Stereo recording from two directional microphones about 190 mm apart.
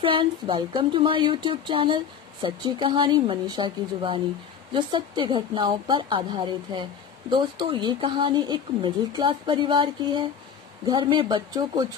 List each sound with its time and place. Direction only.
0.0 s speech: 25° right (ahead or behind)